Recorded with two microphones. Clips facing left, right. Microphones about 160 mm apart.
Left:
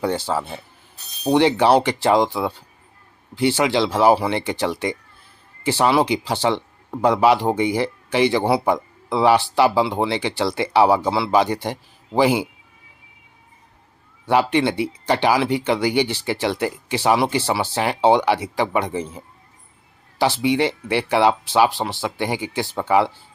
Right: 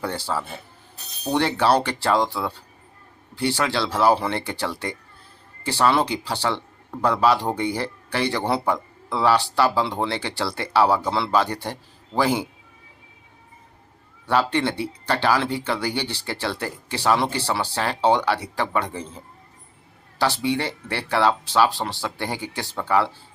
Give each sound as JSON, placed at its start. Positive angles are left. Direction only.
{"t": 0.0, "sound": "speech", "side_deg": 20}
{"t": 14.3, "sound": "speech", "side_deg": 15}